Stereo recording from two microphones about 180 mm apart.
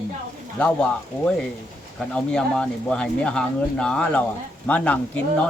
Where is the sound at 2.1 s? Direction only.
5° left (ahead or behind).